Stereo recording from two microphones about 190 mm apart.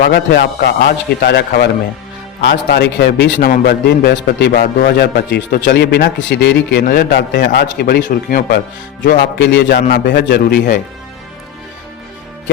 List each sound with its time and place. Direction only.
0.0 s a man's voice: 55° left (ahead or behind)
9.0 s a man's voice: 65° left (ahead or behind)